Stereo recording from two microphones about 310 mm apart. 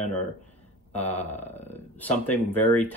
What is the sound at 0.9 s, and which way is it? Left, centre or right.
Speech, centre.